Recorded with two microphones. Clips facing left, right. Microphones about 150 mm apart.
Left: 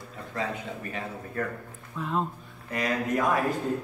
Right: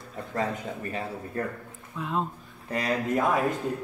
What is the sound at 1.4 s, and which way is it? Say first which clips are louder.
Speech: even; 30° right (ahead or behind).